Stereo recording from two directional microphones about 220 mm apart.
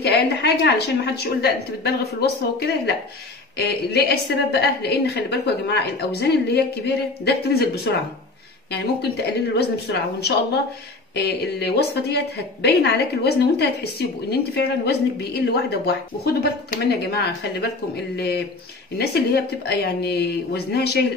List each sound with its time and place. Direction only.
0.0 s a woman's voice: 50° left (ahead or behind)